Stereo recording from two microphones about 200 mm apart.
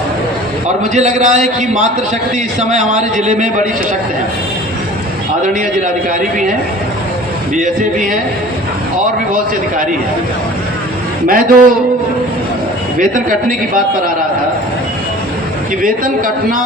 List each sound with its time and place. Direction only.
0.9 s a man's voice: 35° right (ahead or behind)
5.5 s a man's voice: 40° right (ahead or behind)
7.5 s a man's voice: 40° right (ahead or behind)
11.3 s a man's voice: 45° right (ahead or behind)
15.8 s a man's voice: 45° right (ahead or behind)